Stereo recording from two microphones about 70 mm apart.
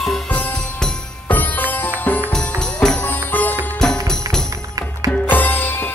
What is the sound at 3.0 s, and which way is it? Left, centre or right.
Music, left.